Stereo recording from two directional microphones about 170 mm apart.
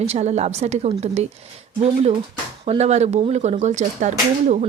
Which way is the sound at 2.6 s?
40° right (ahead or behind).